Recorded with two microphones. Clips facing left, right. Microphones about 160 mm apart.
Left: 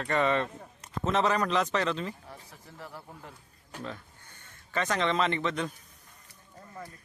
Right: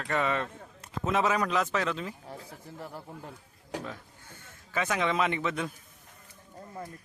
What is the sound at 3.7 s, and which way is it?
Speech, 80° right.